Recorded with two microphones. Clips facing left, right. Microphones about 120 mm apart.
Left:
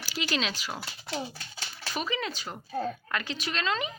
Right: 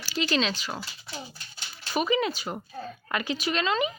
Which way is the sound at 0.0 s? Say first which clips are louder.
Right 4 dB; 5° left (ahead or behind).